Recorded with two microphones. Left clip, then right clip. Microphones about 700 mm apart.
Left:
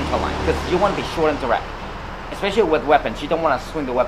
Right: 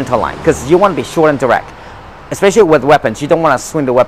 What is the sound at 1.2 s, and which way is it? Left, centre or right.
Speech, right.